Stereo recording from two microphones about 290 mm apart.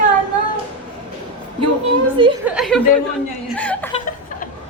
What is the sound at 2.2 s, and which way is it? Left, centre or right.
Speech, centre.